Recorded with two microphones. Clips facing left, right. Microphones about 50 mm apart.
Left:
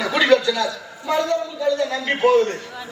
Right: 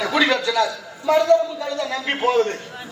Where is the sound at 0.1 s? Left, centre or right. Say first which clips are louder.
Left 4 dB; left.